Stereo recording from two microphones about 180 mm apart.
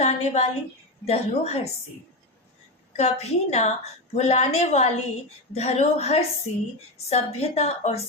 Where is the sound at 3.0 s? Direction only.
35° left (ahead or behind).